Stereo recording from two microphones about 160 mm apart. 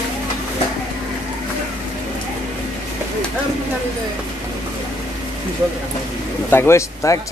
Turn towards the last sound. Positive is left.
turn(degrees=20)  # may be behind; listen again after turning